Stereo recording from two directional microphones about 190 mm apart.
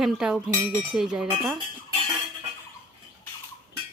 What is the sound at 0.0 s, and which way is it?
Speech, 5° right (ahead or behind).